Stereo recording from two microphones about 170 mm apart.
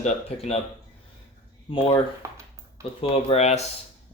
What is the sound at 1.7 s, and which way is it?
Speech, 30° left (ahead or behind).